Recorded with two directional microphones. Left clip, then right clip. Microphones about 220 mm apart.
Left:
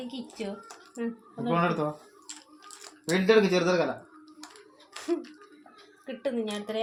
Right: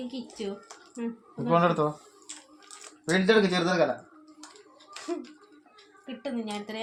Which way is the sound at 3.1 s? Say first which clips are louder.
Left 1 dB; 30° right (ahead or behind).